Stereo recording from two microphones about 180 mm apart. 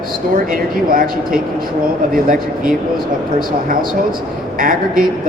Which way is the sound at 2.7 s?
50° right (ahead or behind).